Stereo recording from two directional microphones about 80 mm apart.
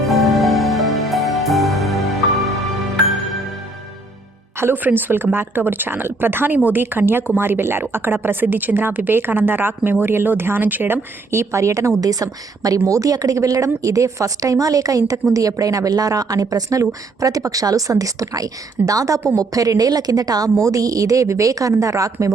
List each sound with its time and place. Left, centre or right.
0.0 s music: centre
4.5 s a woman's voice: right